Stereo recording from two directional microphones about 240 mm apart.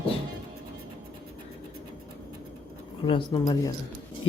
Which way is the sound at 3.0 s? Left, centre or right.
Centre.